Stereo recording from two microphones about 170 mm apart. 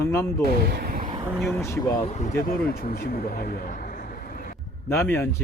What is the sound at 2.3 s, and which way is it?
Speech, 60° left (ahead or behind).